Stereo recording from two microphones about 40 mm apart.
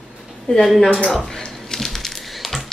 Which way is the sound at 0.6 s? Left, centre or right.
Centre.